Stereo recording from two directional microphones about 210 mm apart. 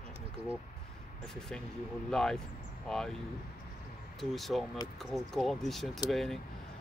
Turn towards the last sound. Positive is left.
turn(degrees=0)  # may be behind; listen again after turning